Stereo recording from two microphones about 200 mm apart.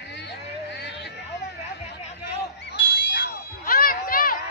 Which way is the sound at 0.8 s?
60° left (ahead or behind).